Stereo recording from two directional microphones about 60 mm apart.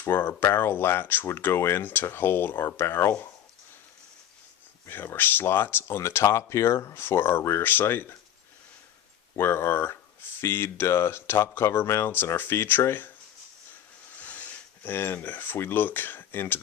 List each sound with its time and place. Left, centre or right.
0.1 s speech: left
4.9 s speech: left
6.0 s speech: left
9.3 s speech: left
14.2 s speech: left